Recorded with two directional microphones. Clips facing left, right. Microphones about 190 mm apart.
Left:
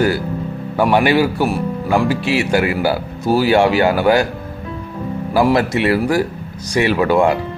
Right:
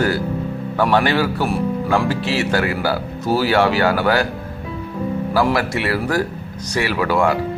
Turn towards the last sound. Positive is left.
turn(degrees=20)  # may be behind; listen again after turning